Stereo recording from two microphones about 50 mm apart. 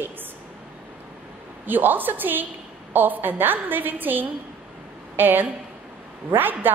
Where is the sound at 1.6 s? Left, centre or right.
Right.